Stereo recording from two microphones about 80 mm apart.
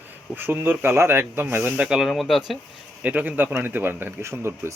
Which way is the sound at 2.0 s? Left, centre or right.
Centre.